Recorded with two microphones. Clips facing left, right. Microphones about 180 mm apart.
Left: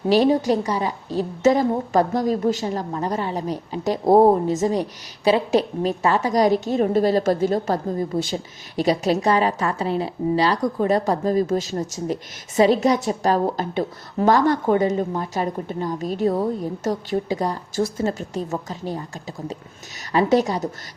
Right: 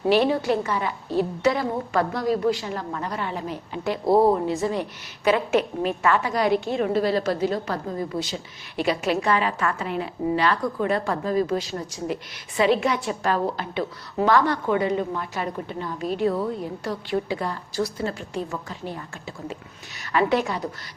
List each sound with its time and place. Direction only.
0.1 s a woman's voice: 40° left (ahead or behind)
20.1 s a woman's voice: 40° left (ahead or behind)